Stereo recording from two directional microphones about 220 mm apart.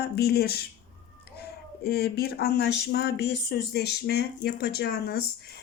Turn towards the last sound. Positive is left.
turn(degrees=50)  # may be behind; listen again after turning